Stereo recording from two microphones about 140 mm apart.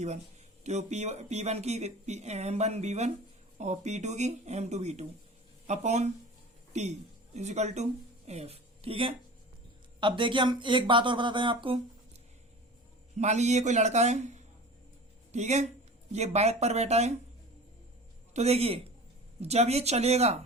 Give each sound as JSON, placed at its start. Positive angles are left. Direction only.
{"t": 0.6, "sound": "a man's voice", "side_deg": -55}
{"t": 13.1, "sound": "a man's voice", "side_deg": -55}
{"t": 18.3, "sound": "speech", "side_deg": -50}